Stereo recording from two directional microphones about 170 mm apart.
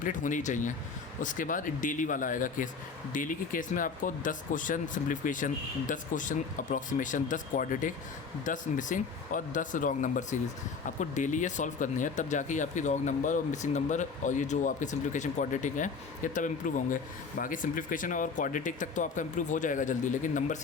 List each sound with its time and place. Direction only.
0.0 s speech: 50° left (ahead or behind)